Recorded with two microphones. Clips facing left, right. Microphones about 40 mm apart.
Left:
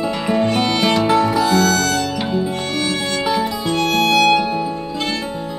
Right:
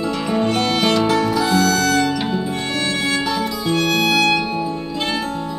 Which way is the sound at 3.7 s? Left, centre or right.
Centre.